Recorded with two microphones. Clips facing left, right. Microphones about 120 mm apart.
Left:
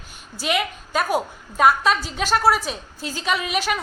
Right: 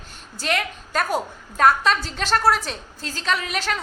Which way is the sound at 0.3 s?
10° left (ahead or behind).